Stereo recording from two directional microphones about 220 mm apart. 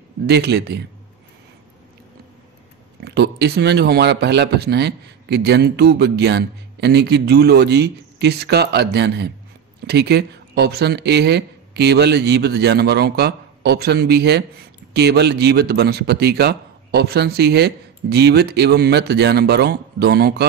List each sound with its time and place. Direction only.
0.3 s speech: 50° right (ahead or behind)
3.0 s speech: 50° right (ahead or behind)